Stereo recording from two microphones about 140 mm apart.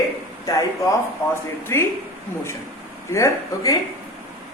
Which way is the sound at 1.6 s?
20° left (ahead or behind).